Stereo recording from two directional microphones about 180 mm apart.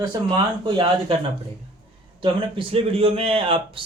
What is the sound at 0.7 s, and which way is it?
Speech, 25° right (ahead or behind).